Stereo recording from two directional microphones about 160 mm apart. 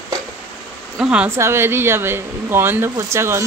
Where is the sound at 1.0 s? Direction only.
5° right (ahead or behind).